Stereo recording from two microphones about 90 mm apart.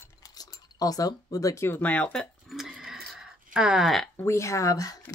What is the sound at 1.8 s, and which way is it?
Speech, 15° left (ahead or behind).